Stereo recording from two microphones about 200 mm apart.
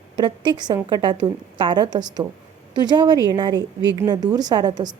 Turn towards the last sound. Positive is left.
turn(degrees=-20)  # may be behind; listen again after turning